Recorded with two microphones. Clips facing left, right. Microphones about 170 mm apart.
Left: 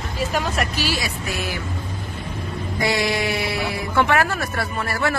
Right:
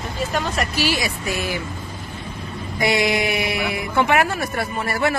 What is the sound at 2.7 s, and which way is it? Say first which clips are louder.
Speech: right 2 dB; 20° right (ahead or behind).